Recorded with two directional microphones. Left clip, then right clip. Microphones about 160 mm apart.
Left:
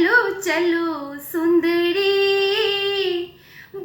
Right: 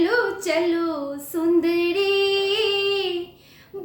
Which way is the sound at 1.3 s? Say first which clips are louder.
Left 2 dB; 35° right (ahead or behind).